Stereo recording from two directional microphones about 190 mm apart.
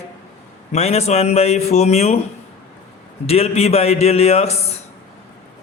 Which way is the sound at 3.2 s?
30° left (ahead or behind).